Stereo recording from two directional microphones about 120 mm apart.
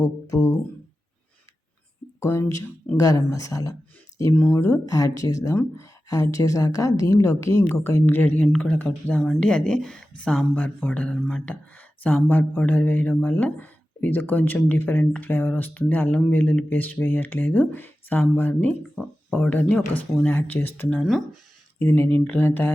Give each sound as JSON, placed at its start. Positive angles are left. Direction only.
{"t": 0.0, "sound": "speech", "side_deg": 25}
{"t": 2.2, "sound": "speech", "side_deg": 20}
{"t": 4.4, "sound": "speech", "side_deg": 15}
{"t": 4.9, "sound": "speech", "side_deg": 30}